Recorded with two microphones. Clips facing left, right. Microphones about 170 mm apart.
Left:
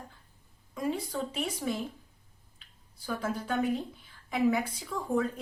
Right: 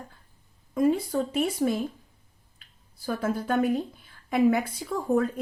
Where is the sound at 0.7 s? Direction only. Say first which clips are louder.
Right 9 dB; 50° right (ahead or behind).